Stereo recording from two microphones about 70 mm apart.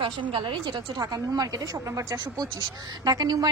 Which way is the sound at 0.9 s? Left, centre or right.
Right.